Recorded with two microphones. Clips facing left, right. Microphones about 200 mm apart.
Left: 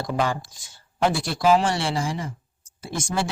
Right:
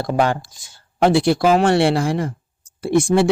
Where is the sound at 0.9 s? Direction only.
65° right (ahead or behind).